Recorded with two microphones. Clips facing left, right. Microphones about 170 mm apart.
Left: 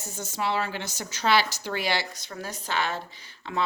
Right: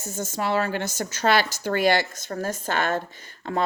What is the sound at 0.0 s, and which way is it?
Speech, 45° right (ahead or behind).